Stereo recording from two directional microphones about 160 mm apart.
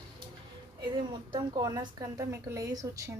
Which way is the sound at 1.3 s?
20° right (ahead or behind).